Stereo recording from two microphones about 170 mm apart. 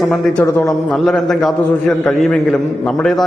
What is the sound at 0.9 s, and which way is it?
A man's voice, centre (ahead or behind).